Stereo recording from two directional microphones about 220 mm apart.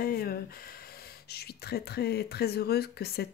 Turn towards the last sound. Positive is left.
turn(degrees=45)  # may be behind; listen again after turning